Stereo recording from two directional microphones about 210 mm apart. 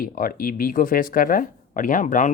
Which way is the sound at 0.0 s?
40° left (ahead or behind).